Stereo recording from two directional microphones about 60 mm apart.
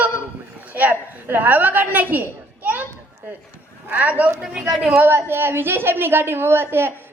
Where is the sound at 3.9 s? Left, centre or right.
Right.